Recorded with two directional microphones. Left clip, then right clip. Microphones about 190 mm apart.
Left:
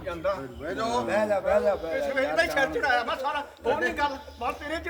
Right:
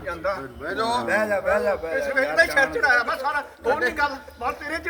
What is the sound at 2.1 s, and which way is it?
A man's voice, 5° right (ahead or behind).